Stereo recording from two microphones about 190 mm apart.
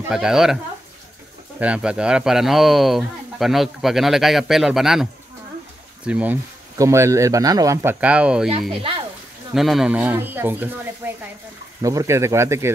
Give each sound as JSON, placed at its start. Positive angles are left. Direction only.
{"t": 0.1, "sound": "speech", "side_deg": -5}
{"t": 1.6, "sound": "speech", "side_deg": -5}
{"t": 6.0, "sound": "speech", "side_deg": -5}
{"t": 9.5, "sound": "speech", "side_deg": 0}
{"t": 11.8, "sound": "speech", "side_deg": -15}